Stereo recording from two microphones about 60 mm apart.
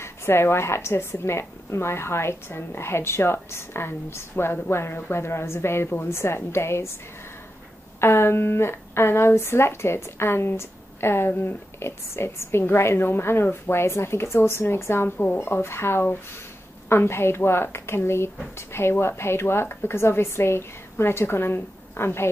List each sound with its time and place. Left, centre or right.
0.0 s a woman's voice: left
8.0 s a woman's voice: left